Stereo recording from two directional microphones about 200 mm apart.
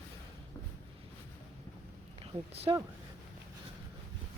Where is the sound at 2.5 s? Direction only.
30° right (ahead or behind).